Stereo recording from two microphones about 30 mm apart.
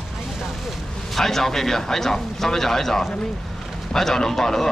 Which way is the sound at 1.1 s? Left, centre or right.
Centre.